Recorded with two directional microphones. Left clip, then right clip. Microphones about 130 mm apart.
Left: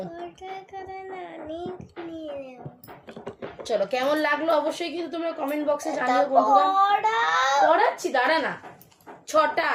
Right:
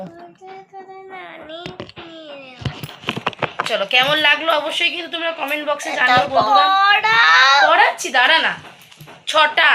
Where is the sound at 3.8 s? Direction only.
40° left (ahead or behind).